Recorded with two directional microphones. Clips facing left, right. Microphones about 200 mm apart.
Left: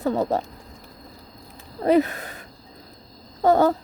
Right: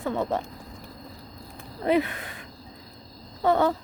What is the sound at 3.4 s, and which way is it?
Speech, 40° left (ahead or behind).